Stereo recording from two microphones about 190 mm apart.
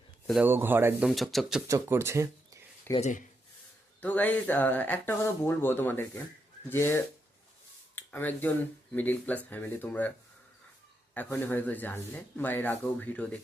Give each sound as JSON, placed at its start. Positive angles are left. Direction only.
{"t": 0.3, "sound": "speech", "side_deg": -5}
{"t": 1.6, "sound": "speech", "side_deg": -15}
{"t": 2.9, "sound": "speech", "side_deg": 40}
{"t": 4.0, "sound": "speech", "side_deg": 10}
{"t": 11.1, "sound": "speech", "side_deg": 10}